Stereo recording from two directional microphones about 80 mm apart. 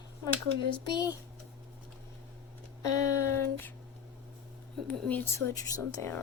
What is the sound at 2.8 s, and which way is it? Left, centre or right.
Speech, left.